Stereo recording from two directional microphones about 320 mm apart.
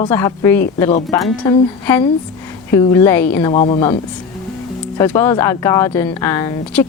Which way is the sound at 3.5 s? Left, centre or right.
Centre.